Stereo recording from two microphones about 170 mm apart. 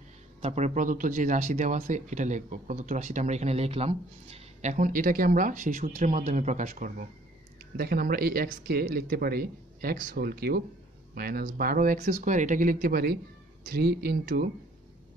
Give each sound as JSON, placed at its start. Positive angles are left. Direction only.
{"t": 0.4, "sound": "speech", "side_deg": -40}
{"t": 7.7, "sound": "speech", "side_deg": -65}